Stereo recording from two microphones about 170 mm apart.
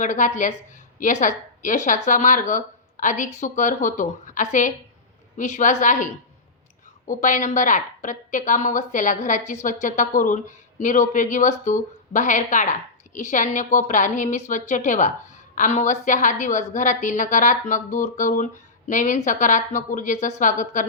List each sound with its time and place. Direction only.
0.0 s a woman's voice: 45° left (ahead or behind)
7.1 s a woman's voice: 50° left (ahead or behind)